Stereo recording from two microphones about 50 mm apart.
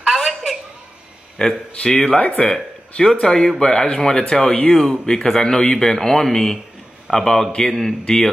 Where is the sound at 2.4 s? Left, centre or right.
Centre.